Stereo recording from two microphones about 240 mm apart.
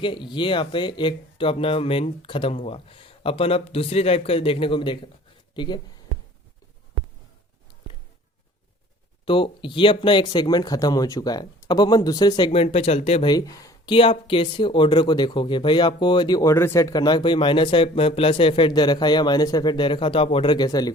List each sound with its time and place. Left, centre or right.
0.0 s speech: centre
9.2 s speech: left
12.5 s speech: left